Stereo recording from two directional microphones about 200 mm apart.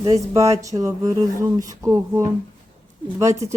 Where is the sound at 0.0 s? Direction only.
15° right (ahead or behind).